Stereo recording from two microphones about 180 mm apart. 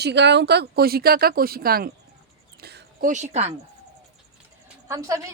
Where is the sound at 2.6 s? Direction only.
55° right (ahead or behind); by 3.6 s 35° right (ahead or behind).